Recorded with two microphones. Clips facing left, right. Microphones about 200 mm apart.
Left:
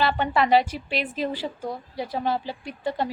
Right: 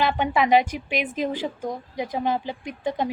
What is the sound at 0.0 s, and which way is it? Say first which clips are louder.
A woman's voice: right 1 dB; 15° right (ahead or behind).